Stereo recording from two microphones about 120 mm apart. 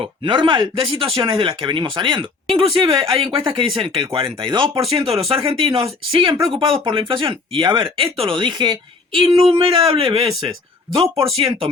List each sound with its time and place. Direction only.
0.0 s speech: 40° right (ahead or behind)
4.9 s speech: 55° right (ahead or behind)